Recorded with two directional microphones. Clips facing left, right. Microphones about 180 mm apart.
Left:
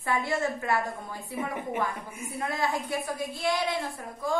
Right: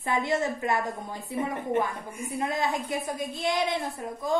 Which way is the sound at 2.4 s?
20° right (ahead or behind).